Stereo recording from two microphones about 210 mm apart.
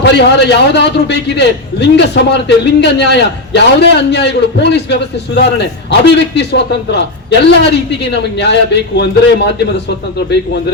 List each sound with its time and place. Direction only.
0.0 s a man's voice: 55° left (ahead or behind)